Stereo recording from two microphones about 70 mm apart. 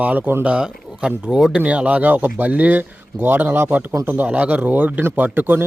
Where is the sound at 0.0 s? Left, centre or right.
Right.